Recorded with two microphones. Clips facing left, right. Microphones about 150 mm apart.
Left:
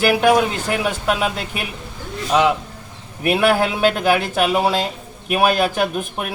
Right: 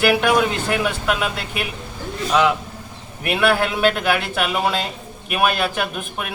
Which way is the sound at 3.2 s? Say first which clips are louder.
Left 2 dB; 35° left (ahead or behind).